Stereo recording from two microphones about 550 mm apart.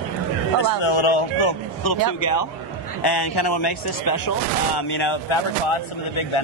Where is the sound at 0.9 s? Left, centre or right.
Left.